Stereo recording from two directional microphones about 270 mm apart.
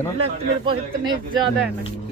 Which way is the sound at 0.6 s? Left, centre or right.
Centre.